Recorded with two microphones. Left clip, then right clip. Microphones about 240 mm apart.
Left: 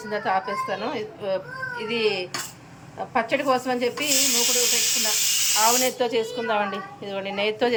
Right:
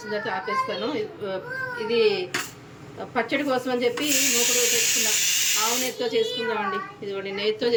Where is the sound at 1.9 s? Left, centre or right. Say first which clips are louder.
Right 3 dB; centre.